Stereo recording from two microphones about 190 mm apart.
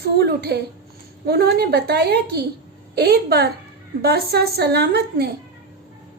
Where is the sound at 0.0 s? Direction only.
55° right (ahead or behind).